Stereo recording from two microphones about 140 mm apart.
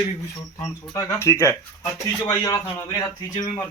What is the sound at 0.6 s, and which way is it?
Speech, 20° left (ahead or behind).